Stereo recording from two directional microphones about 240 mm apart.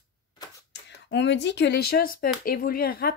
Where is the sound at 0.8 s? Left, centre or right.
Left.